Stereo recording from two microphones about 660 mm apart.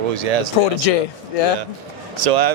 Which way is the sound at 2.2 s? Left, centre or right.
Right.